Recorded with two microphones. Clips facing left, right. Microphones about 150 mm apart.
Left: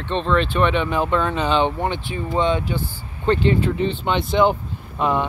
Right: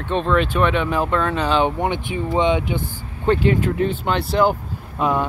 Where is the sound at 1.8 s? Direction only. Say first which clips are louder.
Right 2 dB; 15° right (ahead or behind).